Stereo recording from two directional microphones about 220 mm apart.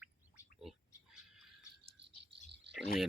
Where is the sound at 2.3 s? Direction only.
50° right (ahead or behind).